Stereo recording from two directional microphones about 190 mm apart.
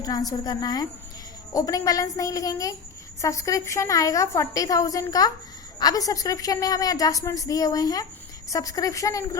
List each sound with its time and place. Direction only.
0.0 s a woman's voice: 20° left (ahead or behind)